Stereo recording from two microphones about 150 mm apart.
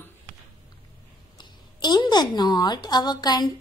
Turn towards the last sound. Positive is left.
turn(degrees=25)  # may be behind; listen again after turning